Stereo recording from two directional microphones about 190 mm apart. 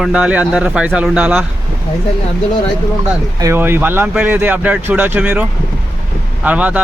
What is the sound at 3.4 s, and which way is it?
Speech, 15° right (ahead or behind).